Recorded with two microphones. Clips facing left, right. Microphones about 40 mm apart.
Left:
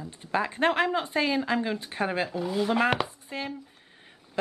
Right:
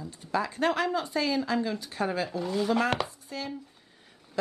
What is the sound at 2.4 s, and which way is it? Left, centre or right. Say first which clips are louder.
Speech: left 1 dB; centre.